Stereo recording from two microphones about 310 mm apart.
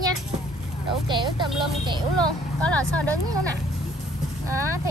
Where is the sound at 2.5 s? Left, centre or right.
Centre.